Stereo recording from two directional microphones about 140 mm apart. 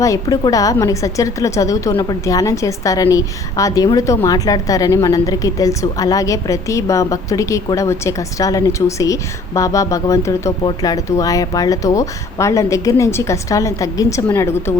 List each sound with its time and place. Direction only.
0.0 s a woman's voice: 25° left (ahead or behind)